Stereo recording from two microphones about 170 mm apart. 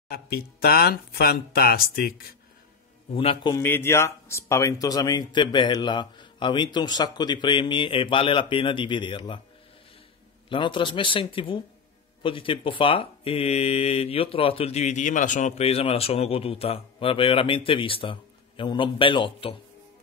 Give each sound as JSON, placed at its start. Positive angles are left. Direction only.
{"t": 0.1, "sound": "speech", "side_deg": 65}
{"t": 3.2, "sound": "speech", "side_deg": 35}
{"t": 3.5, "sound": "speech", "side_deg": 10}
{"t": 10.5, "sound": "speech", "side_deg": 30}